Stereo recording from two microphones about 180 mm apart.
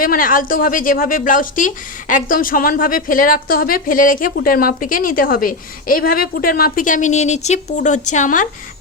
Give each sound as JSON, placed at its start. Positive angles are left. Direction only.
{"t": 0.0, "sound": "a woman's voice", "side_deg": 50}